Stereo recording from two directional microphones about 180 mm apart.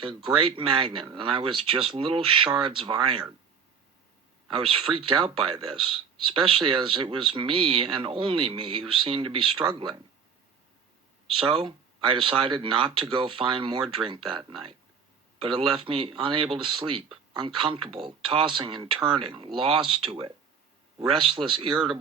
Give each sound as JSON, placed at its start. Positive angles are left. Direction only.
{"t": 0.0, "sound": "speech", "side_deg": -25}
{"t": 4.4, "sound": "speech", "side_deg": -30}
{"t": 11.3, "sound": "speech", "side_deg": -30}